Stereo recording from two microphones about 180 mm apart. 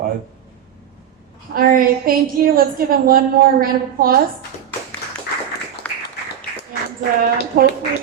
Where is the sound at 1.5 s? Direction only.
55° right (ahead or behind).